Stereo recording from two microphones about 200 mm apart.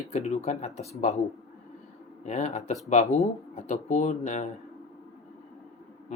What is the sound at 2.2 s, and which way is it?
Speech, 35° left (ahead or behind).